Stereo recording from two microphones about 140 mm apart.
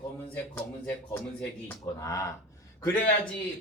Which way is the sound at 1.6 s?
25° left (ahead or behind).